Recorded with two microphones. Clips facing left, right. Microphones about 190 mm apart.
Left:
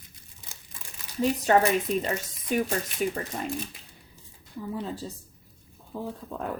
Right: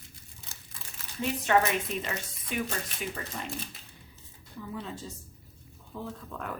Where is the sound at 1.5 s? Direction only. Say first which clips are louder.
Left 3 dB; 40° left (ahead or behind).